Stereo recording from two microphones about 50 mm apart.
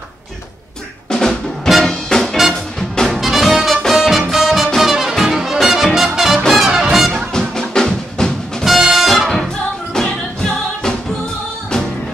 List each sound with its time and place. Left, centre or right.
1.9 s music: centre
3.2 s music: centre
7.3 s music: centre
8.6 s music: centre
9.9 s music: centre